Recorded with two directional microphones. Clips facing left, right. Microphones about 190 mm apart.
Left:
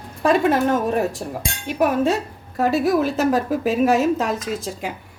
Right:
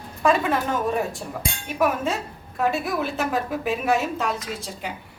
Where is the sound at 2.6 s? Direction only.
40° left (ahead or behind).